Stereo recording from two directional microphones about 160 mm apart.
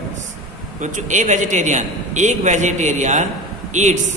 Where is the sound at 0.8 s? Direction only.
50° right (ahead or behind).